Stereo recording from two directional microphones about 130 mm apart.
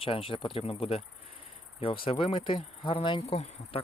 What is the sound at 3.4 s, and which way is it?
Insect, 55° left (ahead or behind).